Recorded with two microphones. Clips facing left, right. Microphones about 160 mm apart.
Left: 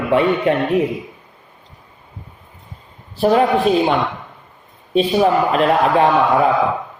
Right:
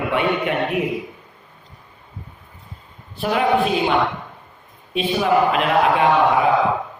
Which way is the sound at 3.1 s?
35° left (ahead or behind).